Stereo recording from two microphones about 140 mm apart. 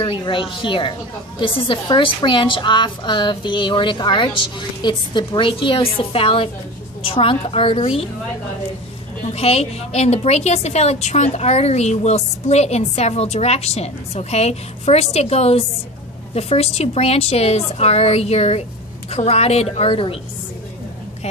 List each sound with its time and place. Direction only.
0.2 s a woman's voice: 35° left (ahead or behind)
9.3 s a woman's voice: 50° left (ahead or behind)